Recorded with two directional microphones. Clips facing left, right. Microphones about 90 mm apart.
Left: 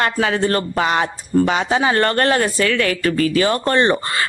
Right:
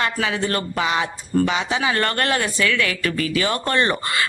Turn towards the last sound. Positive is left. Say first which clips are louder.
# left 5 dB
turn(degrees=30)  # may be behind; listen again after turning